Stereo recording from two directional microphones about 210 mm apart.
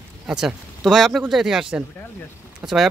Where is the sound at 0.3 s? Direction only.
5° right (ahead or behind).